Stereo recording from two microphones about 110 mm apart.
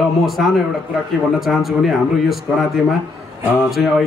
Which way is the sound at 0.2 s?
Centre (ahead or behind).